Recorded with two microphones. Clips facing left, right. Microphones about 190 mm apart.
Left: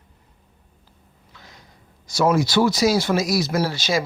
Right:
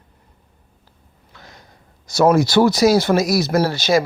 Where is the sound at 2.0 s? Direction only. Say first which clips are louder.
Right 5 dB; 65° right (ahead or behind).